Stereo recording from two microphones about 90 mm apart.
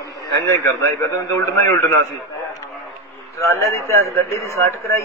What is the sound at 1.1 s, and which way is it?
Speech, 35° left (ahead or behind).